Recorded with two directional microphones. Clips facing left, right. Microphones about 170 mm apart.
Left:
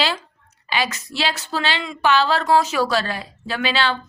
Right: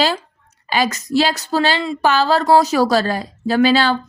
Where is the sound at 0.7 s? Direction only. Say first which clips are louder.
Right 7 dB; 40° right (ahead or behind).